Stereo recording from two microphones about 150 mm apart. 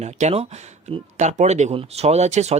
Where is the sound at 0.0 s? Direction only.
45° right (ahead or behind).